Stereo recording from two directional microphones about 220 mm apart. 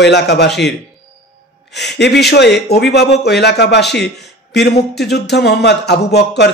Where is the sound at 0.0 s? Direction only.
50° left (ahead or behind).